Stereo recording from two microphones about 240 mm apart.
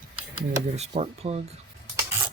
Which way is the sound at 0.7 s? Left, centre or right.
Right.